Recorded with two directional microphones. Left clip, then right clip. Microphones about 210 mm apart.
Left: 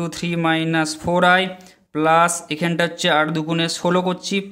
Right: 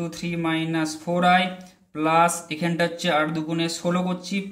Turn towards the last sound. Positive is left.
turn(degrees=40)  # may be behind; listen again after turning